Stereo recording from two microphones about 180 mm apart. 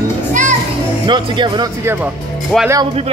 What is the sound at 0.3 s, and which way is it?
Music, 45° right (ahead or behind).